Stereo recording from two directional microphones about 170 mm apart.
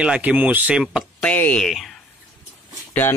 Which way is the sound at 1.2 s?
10° left (ahead or behind).